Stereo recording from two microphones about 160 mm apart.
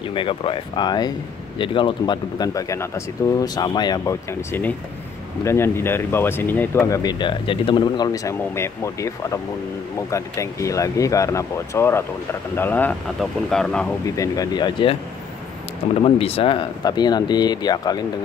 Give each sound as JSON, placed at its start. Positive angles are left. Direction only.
{"t": 0.1, "sound": "speech", "side_deg": 35}
{"t": 14.0, "sound": "speech", "side_deg": 20}
{"t": 16.0, "sound": "speech", "side_deg": 35}